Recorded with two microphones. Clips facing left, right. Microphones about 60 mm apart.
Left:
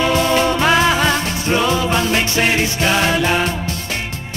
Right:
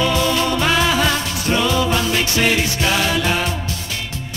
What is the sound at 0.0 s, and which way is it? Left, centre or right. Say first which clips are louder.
Music: left 3 dB; left.